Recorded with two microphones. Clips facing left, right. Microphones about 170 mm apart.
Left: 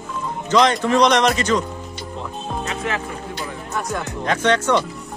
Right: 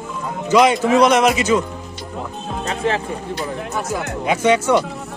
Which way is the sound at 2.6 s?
30° right (ahead or behind).